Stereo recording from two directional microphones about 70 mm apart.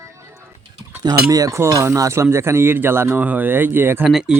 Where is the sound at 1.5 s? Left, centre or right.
Right.